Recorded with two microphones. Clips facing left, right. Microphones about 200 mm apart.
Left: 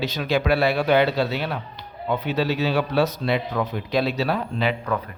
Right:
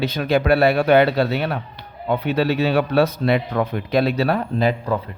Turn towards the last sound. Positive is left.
turn(degrees=-45)  # may be behind; listen again after turning